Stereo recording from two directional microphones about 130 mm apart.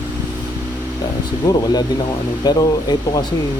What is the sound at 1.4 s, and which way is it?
Speech, 30° left (ahead or behind).